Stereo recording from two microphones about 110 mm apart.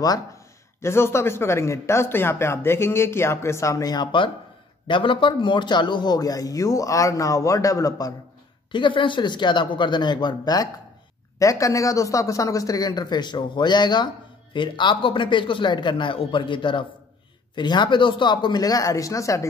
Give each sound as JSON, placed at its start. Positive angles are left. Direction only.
{"t": 0.7, "sound": "a man's voice", "side_deg": 25}
{"t": 8.7, "sound": "a man's voice", "side_deg": 50}